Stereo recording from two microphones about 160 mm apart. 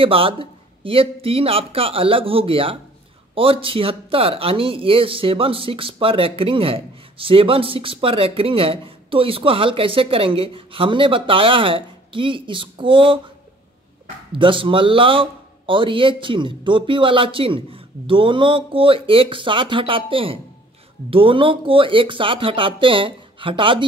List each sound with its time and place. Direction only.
0.0 s speech: 35° right (ahead or behind)
14.3 s speech: 30° right (ahead or behind)